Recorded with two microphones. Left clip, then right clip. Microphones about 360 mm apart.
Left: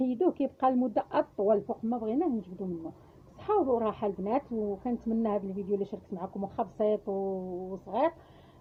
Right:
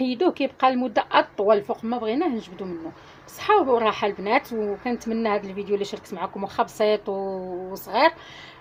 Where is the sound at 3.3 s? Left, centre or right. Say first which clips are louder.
Right 9 dB; left.